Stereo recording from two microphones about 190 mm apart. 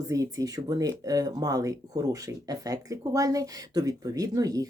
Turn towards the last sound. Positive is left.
turn(degrees=-20)  # may be behind; listen again after turning